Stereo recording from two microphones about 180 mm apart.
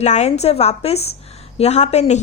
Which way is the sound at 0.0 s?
40° left (ahead or behind).